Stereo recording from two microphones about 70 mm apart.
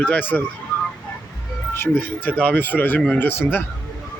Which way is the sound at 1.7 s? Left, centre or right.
Left.